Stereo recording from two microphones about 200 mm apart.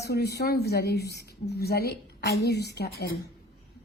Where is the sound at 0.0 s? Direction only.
55° left (ahead or behind).